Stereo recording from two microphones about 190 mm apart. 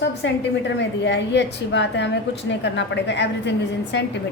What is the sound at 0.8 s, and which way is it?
A woman's voice, 70° left (ahead or behind).